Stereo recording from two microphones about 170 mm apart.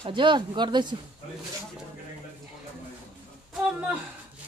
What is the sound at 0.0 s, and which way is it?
Speech, 30° right (ahead or behind).